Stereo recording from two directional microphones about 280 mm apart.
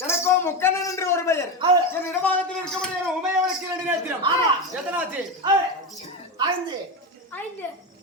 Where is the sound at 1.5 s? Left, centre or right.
Centre.